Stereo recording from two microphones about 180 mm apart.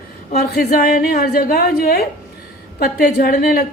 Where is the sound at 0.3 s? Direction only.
55° left (ahead or behind).